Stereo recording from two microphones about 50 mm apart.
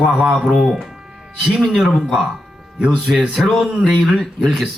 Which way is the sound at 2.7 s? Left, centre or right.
Right.